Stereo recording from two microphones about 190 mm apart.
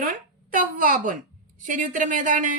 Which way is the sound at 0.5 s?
45° right (ahead or behind).